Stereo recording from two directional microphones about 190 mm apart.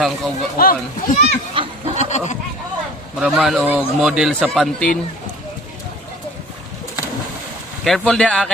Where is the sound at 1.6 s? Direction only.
25° right (ahead or behind).